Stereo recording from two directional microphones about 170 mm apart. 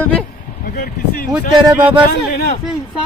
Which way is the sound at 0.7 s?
65° left (ahead or behind).